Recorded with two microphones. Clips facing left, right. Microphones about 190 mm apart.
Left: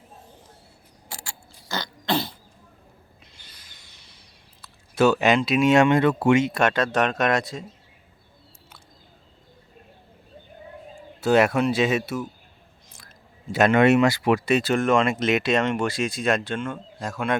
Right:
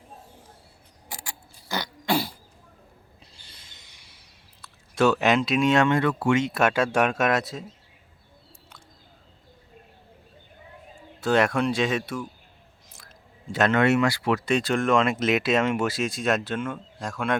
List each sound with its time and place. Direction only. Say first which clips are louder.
1.0 s mechanisms: even; 15° right (ahead or behind)
3.3 s a sound: even; 25° right (ahead or behind)
4.6 s speech: left 2 dB; centre (ahead or behind); by 6.4 s 20° left (ahead or behind)
6.4 s speech: left 1 dB; 5° right (ahead or behind)
11.2 s speech: left 3 dB; 10° left (ahead or behind)